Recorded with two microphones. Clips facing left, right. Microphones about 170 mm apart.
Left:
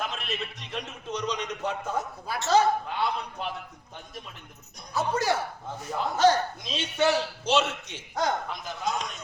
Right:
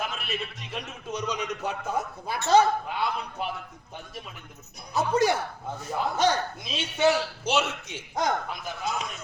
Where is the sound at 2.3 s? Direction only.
20° right (ahead or behind).